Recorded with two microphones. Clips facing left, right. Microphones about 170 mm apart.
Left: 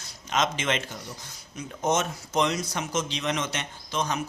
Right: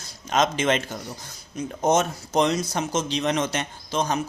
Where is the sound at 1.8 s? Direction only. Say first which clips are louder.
Right 5 dB; 35° right (ahead or behind).